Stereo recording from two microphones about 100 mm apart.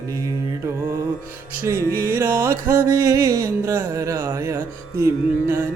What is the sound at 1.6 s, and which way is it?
Music, 25° right (ahead or behind).